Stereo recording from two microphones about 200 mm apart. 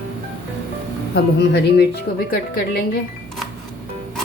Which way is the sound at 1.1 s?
55° left (ahead or behind).